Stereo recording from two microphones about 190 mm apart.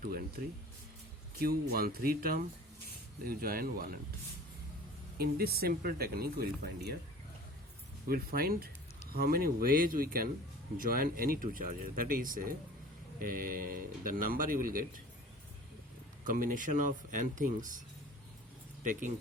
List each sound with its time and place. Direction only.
0.0 s speech: 50° right (ahead or behind)
1.4 s speech: 50° right (ahead or behind)
5.1 s speech: 55° right (ahead or behind)
8.1 s speech: 50° right (ahead or behind)
16.2 s speech: 45° right (ahead or behind)